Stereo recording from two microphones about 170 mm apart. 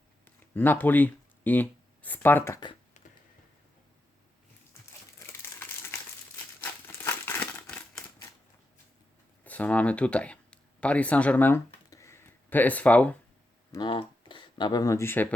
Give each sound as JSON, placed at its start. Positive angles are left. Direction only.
{"t": 0.5, "sound": "speech", "side_deg": 10}
{"t": 5.2, "sound": "crumpling", "side_deg": 15}
{"t": 9.4, "sound": "a sound", "side_deg": 10}
{"t": 13.7, "sound": "speech", "side_deg": 25}